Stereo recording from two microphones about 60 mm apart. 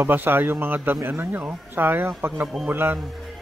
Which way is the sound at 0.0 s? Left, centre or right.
Right.